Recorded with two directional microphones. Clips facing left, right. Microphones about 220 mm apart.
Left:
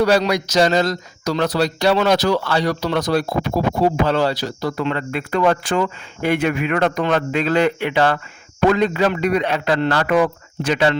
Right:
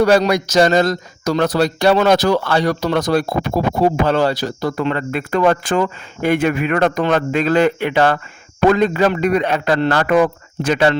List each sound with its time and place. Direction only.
0.0 s speech: 50° right (ahead or behind)